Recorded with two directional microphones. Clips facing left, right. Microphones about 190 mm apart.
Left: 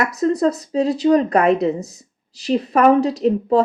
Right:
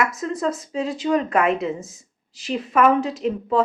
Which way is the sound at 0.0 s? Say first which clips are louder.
Left 6 dB; 35° left (ahead or behind).